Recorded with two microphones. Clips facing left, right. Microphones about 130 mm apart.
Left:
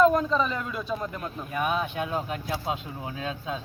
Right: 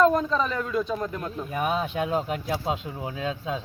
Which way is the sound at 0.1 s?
5° left (ahead or behind).